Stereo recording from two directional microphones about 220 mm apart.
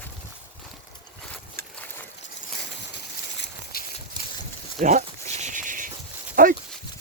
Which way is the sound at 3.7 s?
45° left (ahead or behind).